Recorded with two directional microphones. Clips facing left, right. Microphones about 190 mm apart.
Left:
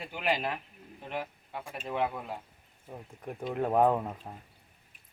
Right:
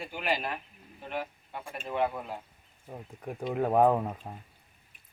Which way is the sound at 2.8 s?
5° right (ahead or behind).